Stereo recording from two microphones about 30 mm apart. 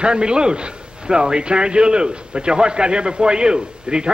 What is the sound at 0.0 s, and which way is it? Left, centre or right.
A man's voice, right.